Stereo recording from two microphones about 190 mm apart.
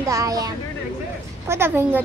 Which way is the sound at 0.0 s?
15° right (ahead or behind).